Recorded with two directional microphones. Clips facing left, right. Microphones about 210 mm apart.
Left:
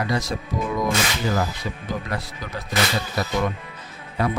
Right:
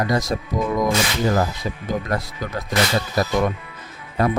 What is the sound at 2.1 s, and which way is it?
Speech, 45° right (ahead or behind).